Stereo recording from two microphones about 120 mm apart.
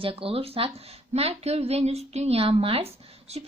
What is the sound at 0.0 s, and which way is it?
A woman's voice, 50° right (ahead or behind).